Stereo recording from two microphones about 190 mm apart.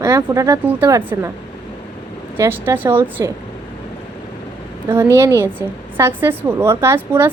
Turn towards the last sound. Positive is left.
turn(degrees=-10)  # may be behind; listen again after turning